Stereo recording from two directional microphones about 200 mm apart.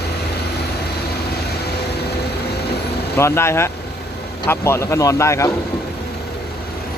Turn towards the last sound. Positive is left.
turn(degrees=15)  # may be behind; listen again after turning